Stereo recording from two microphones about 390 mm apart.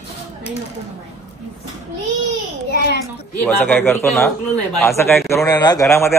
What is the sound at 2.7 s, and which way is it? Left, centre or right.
Speech, left.